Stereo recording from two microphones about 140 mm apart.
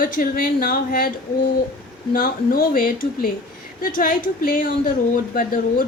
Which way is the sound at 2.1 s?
90° left.